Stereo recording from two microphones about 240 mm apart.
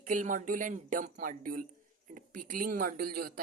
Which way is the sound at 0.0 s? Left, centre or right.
Right.